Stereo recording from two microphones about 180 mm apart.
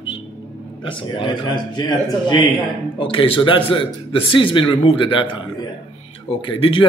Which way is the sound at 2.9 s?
30° left (ahead or behind).